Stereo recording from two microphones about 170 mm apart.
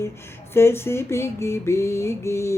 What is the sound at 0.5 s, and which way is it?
Speech, 15° left (ahead or behind).